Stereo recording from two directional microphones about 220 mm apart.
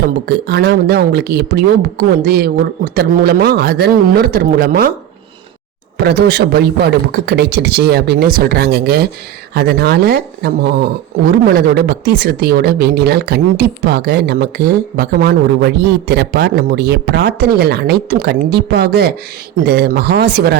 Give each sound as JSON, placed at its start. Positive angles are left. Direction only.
{"t": 0.3, "sound": "a woman's voice", "side_deg": -45}
{"t": 6.0, "sound": "a woman's voice", "side_deg": -45}